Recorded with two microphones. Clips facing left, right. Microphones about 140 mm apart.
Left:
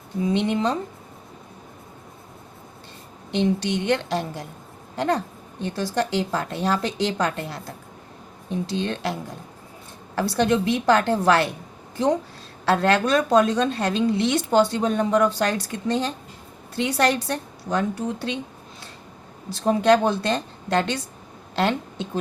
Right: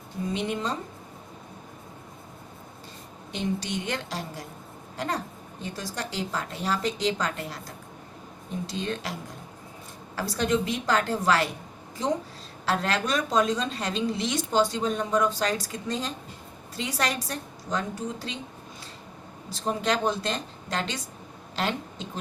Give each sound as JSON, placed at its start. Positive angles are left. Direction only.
{"t": 0.3, "sound": "a woman's voice", "side_deg": 65}
{"t": 3.3, "sound": "a woman's voice", "side_deg": 65}
{"t": 10.2, "sound": "a woman's voice", "side_deg": 65}
{"t": 12.6, "sound": "a woman's voice", "side_deg": 65}
{"t": 19.5, "sound": "a woman's voice", "side_deg": 65}